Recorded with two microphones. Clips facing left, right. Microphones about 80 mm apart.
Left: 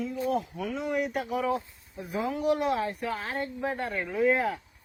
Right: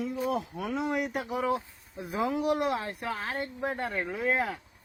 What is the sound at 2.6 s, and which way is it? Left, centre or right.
Speech, centre.